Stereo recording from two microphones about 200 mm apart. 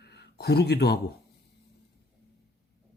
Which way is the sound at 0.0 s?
55° left (ahead or behind).